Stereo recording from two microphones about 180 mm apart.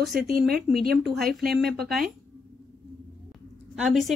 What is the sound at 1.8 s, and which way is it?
Speech, centre (ahead or behind).